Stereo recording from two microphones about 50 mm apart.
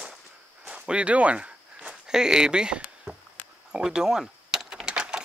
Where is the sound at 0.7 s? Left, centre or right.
Centre.